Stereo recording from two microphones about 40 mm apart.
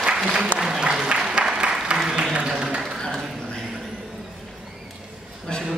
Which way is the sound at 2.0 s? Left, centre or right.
Centre.